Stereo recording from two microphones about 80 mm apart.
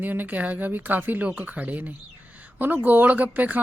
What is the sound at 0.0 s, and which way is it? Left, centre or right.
Speech, right.